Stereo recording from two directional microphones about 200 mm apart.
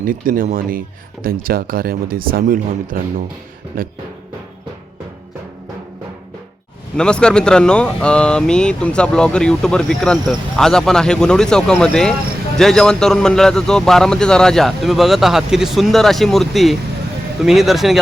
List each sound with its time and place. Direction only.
0.0 s speech: 45° right (ahead or behind)
6.9 s speech: 5° left (ahead or behind)